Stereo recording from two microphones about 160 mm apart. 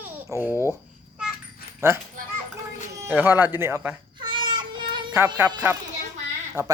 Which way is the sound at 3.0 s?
10° right (ahead or behind).